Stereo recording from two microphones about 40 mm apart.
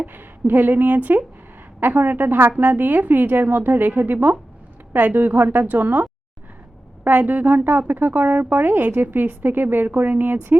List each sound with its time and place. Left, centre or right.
0.1 s a woman's voice: right